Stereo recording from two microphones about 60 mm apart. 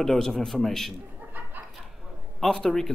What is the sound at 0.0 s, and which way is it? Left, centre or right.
Speech, centre.